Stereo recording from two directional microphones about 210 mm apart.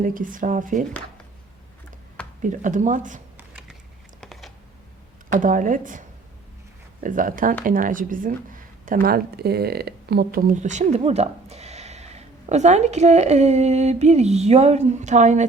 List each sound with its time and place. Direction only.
0.0 s speech: 40° right (ahead or behind)
2.4 s speech: 35° right (ahead or behind)
4.2 s computer keyboard: centre (ahead or behind)
5.3 s speech: 40° right (ahead or behind)